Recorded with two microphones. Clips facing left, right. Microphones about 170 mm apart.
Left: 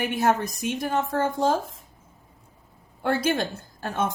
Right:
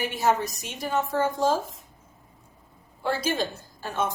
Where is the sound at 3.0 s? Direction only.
55° left (ahead or behind).